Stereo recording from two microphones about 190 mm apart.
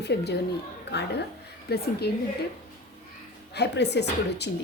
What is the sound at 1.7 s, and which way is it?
Speech, 55° left (ahead or behind).